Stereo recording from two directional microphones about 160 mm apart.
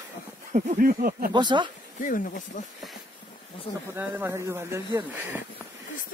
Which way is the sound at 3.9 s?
15° right (ahead or behind).